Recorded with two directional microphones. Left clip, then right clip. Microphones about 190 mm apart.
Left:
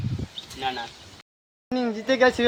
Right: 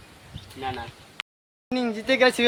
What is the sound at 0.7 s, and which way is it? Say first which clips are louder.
Speech: left 3 dB; 30° left (ahead or behind).